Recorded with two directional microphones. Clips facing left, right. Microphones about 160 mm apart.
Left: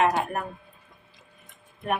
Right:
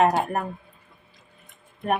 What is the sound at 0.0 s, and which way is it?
Speech, 40° right (ahead or behind).